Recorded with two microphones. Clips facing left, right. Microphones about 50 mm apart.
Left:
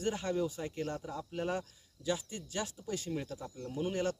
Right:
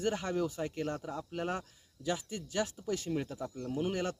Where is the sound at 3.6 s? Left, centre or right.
Right.